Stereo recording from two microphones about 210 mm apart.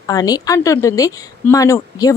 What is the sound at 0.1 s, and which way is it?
A woman's voice, 15° left (ahead or behind).